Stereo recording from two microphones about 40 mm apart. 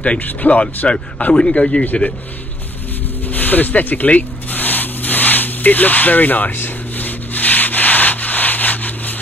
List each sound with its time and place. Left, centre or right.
0.2 s speech: left
0.8 s a man's voice: left
3.3 s rub: left